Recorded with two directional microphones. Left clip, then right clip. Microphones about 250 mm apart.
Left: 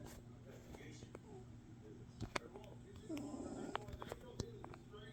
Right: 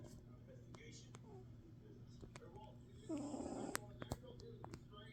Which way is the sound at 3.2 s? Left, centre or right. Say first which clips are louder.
Right 1 dB; centre.